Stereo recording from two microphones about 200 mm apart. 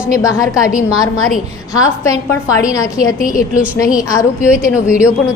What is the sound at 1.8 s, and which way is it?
A woman's voice, 15° left (ahead or behind).